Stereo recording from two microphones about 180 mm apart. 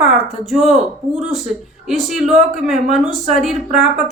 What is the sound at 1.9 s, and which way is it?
A woman's voice, centre (ahead or behind).